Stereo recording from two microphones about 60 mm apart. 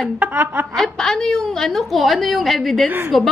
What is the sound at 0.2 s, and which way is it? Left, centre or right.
Speech, right.